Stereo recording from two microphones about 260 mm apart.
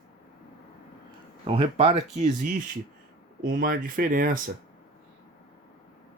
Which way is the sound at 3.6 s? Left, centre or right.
Right.